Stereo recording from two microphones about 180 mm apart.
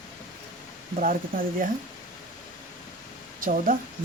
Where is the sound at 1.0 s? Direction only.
50° right (ahead or behind).